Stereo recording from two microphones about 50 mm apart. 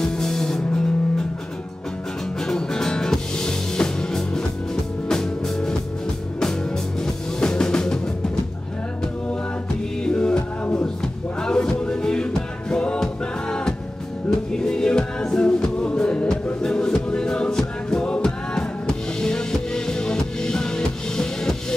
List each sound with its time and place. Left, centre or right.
0.1 s music: centre
2.4 s music: centre
10.0 s music: centre